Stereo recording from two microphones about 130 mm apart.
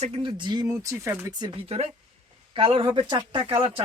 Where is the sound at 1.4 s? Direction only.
45° right (ahead or behind).